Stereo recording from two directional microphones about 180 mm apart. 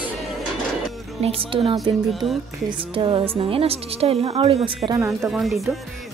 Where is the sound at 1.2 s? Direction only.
30° right (ahead or behind).